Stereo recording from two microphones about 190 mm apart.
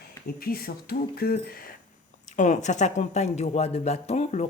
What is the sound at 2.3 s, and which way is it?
Speech, 40° left (ahead or behind).